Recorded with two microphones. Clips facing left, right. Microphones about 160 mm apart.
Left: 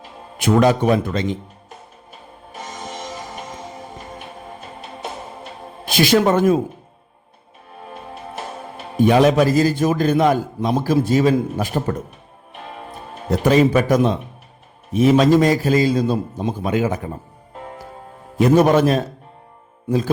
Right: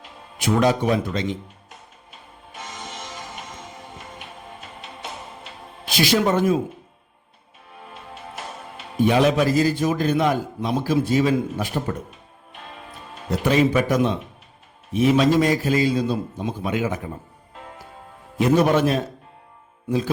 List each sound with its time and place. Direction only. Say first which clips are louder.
0.3 s a man's voice: left 4 dB; 55° left (ahead or behind)
2.5 s music: left 4 dB; 35° left (ahead or behind)
5.9 s a man's voice: left 4 dB; 50° left (ahead or behind)
8.8 s a man's voice: left 4 dB; 50° left (ahead or behind)
13.4 s a man's voice: left 4 dB; 45° left (ahead or behind)
18.3 s a man's voice: left 4 dB; 45° left (ahead or behind)